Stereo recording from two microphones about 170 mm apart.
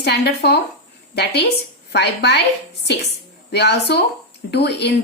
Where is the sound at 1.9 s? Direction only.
75° left (ahead or behind).